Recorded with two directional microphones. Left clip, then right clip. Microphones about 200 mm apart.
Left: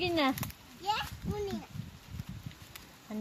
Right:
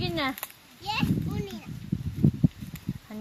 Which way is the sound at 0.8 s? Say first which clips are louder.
Right 2 dB; 35° left (ahead or behind).